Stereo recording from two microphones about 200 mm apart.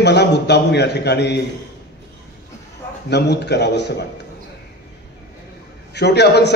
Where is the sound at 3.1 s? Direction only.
55° left (ahead or behind).